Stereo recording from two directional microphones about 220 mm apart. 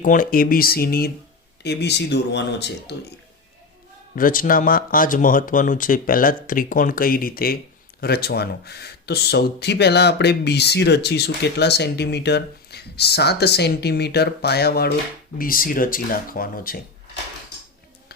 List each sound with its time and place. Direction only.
0.0 s speech: 40° left (ahead or behind)
4.1 s speech: 40° left (ahead or behind)